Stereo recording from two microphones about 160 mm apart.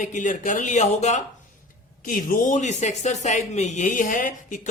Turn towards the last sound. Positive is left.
turn(degrees=55)  # may be behind; listen again after turning